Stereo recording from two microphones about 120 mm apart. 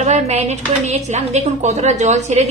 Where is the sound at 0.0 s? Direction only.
70° right (ahead or behind).